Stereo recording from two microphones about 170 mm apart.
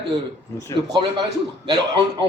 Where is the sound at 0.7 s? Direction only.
20° left (ahead or behind).